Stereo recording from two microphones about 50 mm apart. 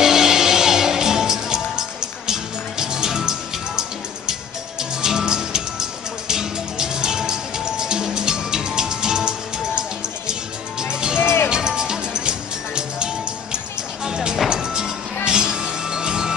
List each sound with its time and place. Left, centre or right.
0.0 s music: centre
5.0 s music: centre
11.1 s music: left
11.4 s music: centre